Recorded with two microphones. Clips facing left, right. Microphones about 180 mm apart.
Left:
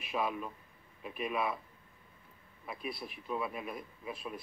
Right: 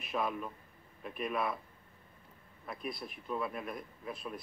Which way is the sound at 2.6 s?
5° left (ahead or behind).